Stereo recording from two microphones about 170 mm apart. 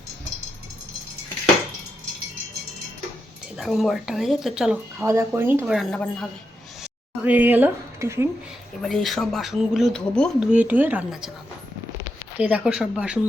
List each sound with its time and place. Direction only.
3.6 s speech: centre (ahead or behind)
5.6 s speech: centre (ahead or behind)
7.3 s speech: 10° right (ahead or behind)
8.8 s speech: centre (ahead or behind)
12.4 s speech: 5° right (ahead or behind)